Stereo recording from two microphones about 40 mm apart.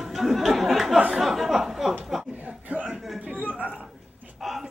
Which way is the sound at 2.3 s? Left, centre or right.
Right.